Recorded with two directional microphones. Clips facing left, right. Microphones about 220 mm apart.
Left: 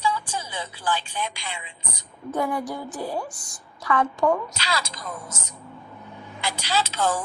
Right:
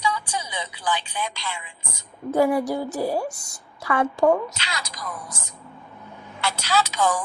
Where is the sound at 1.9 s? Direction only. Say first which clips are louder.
Right 7 dB; 25° right (ahead or behind).